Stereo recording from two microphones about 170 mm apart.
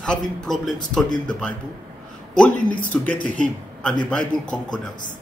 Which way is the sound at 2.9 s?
10° left (ahead or behind).